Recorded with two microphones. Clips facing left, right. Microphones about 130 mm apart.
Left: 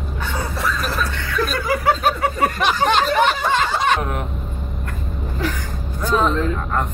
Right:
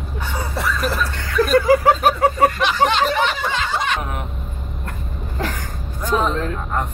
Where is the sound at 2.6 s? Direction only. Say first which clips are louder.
Even; 50° left (ahead or behind).